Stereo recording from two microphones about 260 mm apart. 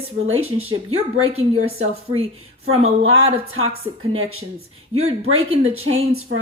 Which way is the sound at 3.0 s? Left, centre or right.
Right.